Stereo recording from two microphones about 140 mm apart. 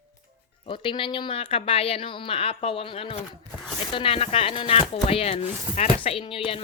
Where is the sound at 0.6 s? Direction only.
35° left (ahead or behind).